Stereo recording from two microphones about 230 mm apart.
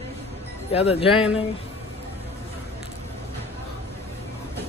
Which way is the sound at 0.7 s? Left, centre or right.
Left.